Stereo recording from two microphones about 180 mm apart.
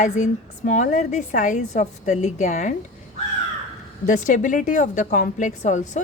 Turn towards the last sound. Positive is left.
turn(degrees=45)  # may be behind; listen again after turning